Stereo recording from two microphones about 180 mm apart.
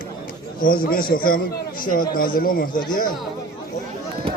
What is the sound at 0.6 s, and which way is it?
Speech, 55° left (ahead or behind).